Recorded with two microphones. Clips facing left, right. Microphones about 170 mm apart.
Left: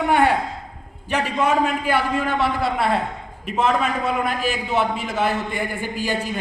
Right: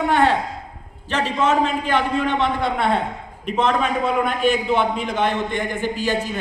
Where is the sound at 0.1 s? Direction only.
10° left (ahead or behind).